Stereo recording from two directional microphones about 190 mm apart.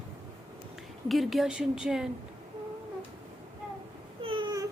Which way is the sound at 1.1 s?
Centre (ahead or behind).